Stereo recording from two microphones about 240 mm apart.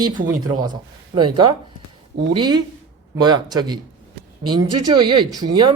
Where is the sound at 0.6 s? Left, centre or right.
Centre.